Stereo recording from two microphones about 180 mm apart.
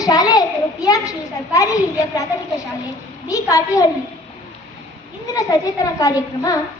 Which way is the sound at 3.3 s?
20° left (ahead or behind).